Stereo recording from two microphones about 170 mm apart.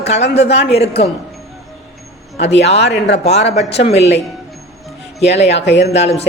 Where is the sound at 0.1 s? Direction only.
90° left.